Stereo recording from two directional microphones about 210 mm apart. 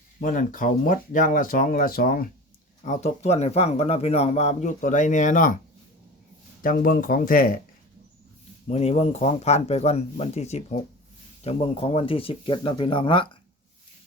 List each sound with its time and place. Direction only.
0.2 s speech: 40° left (ahead or behind)
2.8 s speech: 35° left (ahead or behind)
6.6 s speech: 40° left (ahead or behind)
8.6 s speech: 30° left (ahead or behind)